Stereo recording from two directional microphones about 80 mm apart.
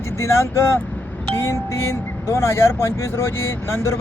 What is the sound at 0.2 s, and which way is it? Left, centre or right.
Speech, left.